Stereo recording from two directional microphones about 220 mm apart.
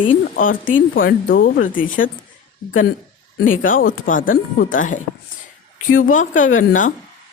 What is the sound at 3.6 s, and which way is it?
Speech, 40° left (ahead or behind).